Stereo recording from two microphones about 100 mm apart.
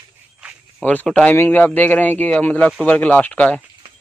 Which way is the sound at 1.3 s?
20° left (ahead or behind).